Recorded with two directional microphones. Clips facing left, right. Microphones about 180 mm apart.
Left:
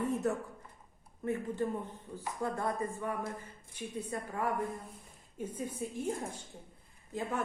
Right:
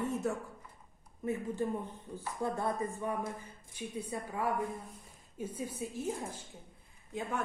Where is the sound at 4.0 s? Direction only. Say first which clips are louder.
Left 1 dB; 10° right (ahead or behind).